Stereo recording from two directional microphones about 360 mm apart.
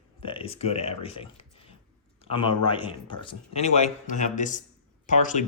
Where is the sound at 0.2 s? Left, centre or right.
Centre.